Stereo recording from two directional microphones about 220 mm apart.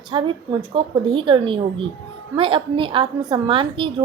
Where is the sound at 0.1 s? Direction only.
20° right (ahead or behind).